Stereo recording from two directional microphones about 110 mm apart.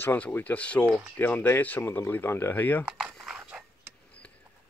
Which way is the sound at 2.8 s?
5° right (ahead or behind).